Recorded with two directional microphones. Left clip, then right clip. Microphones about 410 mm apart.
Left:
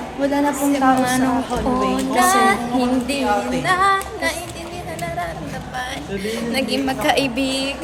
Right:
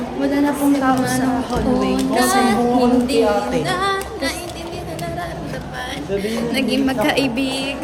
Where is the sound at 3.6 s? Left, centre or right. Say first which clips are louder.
Left 3 dB; centre.